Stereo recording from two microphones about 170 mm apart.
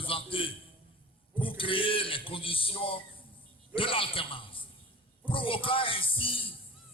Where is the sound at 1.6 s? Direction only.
30° left (ahead or behind).